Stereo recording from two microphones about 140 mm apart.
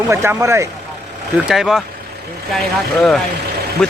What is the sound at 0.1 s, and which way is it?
Speech, 20° right (ahead or behind).